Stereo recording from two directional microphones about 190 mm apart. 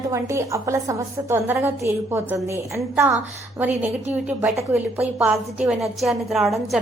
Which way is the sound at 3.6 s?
10° right (ahead or behind).